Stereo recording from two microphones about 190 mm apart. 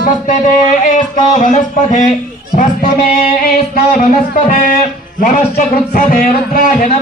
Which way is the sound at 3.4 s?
50° left (ahead or behind).